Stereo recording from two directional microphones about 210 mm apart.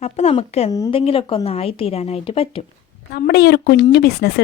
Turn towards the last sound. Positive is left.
turn(degrees=50)  # may be behind; listen again after turning